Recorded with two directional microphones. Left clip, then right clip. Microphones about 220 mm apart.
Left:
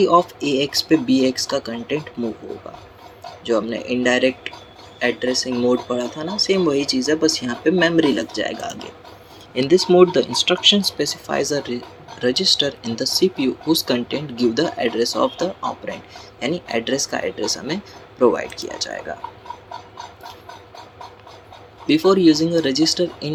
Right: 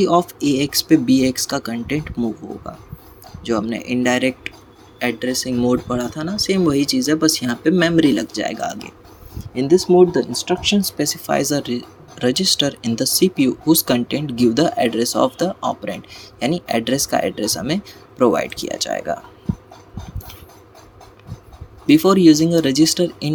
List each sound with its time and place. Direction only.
0.0 s speech: 50° right (ahead or behind)
9.6 s speech: 35° right (ahead or behind); by 19.1 s 55° right (ahead or behind)
21.8 s speech: 50° right (ahead or behind)